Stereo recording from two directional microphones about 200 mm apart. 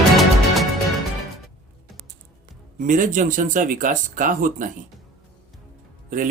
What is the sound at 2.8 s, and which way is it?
Speech, 40° right (ahead or behind).